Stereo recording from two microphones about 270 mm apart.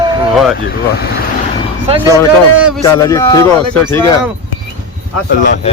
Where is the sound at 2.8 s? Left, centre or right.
Centre.